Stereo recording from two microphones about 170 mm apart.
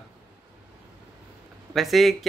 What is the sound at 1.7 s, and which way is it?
Speech, centre (ahead or behind).